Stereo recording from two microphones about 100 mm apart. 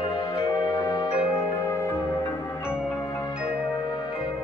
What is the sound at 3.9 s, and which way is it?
Music, 50° left (ahead or behind).